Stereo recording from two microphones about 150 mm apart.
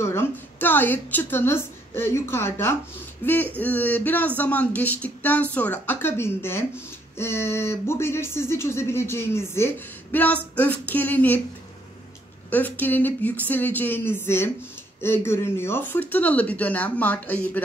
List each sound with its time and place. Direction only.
0.0 s speech: 15° left (ahead or behind)
12.4 s speech: 10° left (ahead or behind)